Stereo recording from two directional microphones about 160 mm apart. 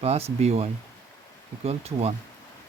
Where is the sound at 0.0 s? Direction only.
40° right (ahead or behind).